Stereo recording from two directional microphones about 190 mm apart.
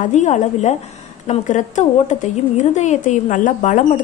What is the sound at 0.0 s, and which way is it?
A woman's voice, 40° left (ahead or behind).